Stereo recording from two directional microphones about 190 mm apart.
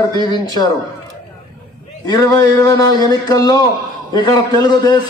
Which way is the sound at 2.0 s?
20° left (ahead or behind).